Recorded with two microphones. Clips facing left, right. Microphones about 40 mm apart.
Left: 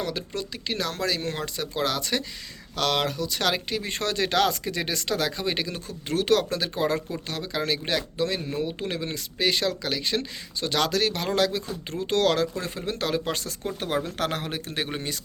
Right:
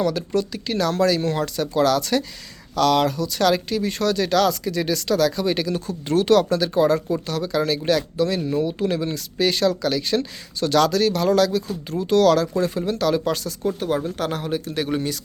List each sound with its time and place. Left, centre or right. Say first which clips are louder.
0.1 s speech: right 8 dB; centre
2.7 s speech: right 7 dB; left
5.7 s speech: right 7 dB; centre
10.8 s speech: right 7 dB; left
13.4 s a man's voice: right 7 dB; left
14.8 s speech: right 8 dB; left